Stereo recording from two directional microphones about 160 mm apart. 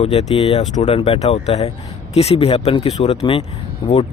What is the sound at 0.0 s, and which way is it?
Speech, 40° left (ahead or behind).